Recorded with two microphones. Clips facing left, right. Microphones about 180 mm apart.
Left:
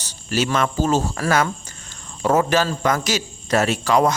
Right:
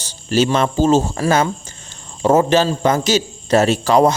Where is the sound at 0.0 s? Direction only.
30° right (ahead or behind).